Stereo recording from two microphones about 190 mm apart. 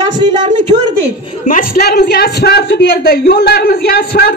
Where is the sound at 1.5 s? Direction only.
50° left (ahead or behind).